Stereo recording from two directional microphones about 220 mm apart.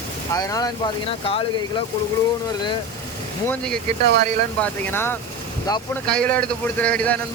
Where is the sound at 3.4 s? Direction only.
5° left (ahead or behind).